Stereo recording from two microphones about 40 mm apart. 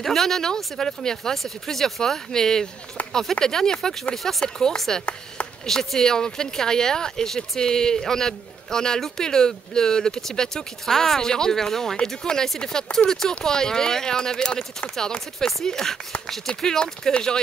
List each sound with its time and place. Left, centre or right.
0.0 s speech: centre